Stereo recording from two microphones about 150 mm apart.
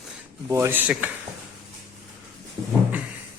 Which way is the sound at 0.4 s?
15° right (ahead or behind).